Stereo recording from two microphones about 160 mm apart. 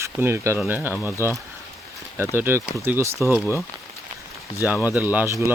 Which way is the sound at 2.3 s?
15° right (ahead or behind).